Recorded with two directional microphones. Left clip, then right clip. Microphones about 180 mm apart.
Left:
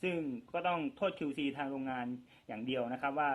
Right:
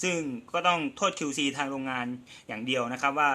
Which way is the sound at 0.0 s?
45° right (ahead or behind).